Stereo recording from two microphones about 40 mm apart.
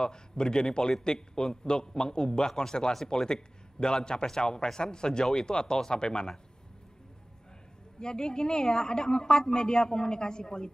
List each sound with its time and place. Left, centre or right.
0.0 s a woman's voice: centre
8.0 s a woman's voice: centre